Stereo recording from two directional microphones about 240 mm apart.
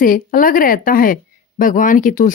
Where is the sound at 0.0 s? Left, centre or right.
Left.